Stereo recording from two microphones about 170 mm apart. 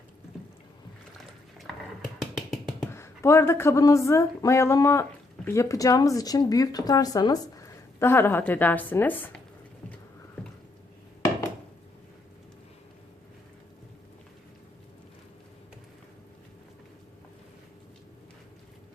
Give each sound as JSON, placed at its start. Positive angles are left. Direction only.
{"t": 2.3, "sound": "finger snapping", "side_deg": -5}
{"t": 2.9, "sound": "speech", "side_deg": 15}